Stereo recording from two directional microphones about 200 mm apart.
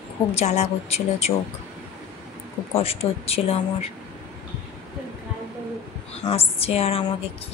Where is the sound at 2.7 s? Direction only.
30° left (ahead or behind).